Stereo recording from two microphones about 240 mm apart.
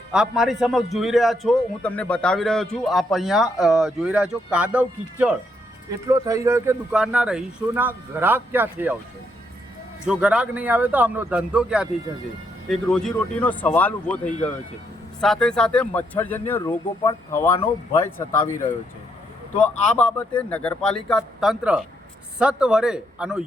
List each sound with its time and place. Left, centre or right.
0.1 s a man's voice: centre
10.1 s a man's voice: centre
19.5 s a man's voice: centre